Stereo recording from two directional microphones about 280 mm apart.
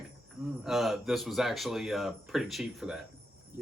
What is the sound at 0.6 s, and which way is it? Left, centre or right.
Speech, centre.